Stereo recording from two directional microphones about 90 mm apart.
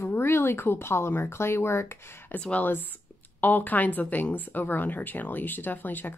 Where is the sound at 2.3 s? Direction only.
15° left (ahead or behind).